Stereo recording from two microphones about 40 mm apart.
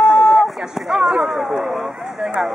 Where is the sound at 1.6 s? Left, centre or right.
Centre.